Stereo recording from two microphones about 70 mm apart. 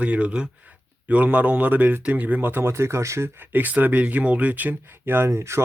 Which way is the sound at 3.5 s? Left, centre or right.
Right.